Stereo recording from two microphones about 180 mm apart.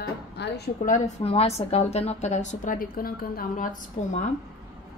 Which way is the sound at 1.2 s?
35° left (ahead or behind).